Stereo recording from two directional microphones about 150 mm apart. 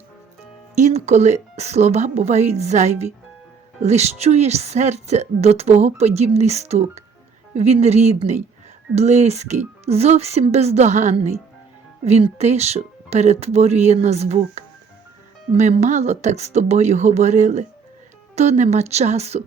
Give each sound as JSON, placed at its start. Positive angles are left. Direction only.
{"t": 0.8, "sound": "a woman's voice", "side_deg": -50}